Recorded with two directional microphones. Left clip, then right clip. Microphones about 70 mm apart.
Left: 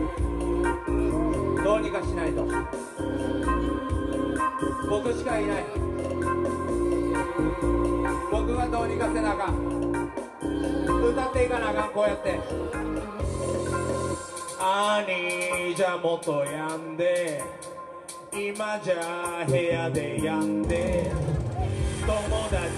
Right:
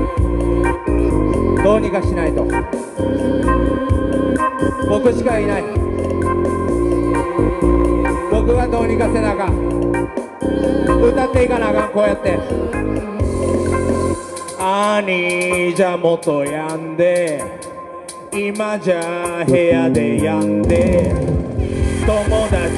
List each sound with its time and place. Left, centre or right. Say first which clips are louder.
1.3 s speech: right 11 dB; right
4.1 s music: right 9 dB; right
13.5 s music: right 10 dB; right
18.6 s music: right 9 dB; right